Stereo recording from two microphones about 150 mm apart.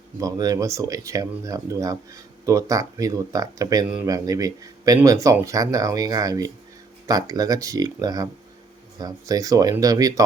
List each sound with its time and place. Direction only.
0.2 s speech: 25° right (ahead or behind)